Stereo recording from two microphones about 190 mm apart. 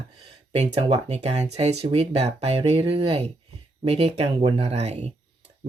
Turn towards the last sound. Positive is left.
turn(degrees=-35)  # may be behind; listen again after turning